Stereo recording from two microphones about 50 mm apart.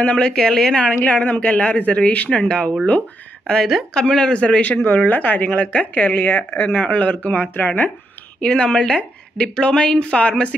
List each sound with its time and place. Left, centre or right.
0.0 s a woman's voice: left
1.0 s a woman's voice: left
3.9 s a woman's voice: centre
4.8 s a woman's voice: left
8.4 s a woman's voice: left